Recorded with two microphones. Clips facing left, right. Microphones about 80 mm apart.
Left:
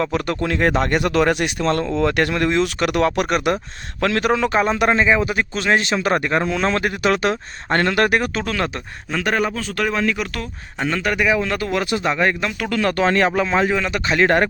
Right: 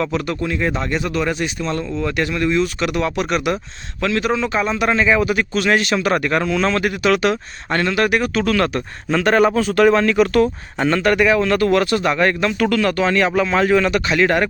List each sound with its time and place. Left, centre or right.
0.1 s a man's voice: left
4.5 s a man's voice: left
4.9 s a man's voice: left
8.4 s a man's voice: centre
9.1 s speech: centre
12.8 s a man's voice: left
13.3 s speech: left
14.1 s a man's voice: left